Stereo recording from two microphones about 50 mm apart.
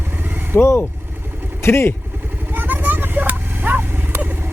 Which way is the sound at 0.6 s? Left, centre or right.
Left.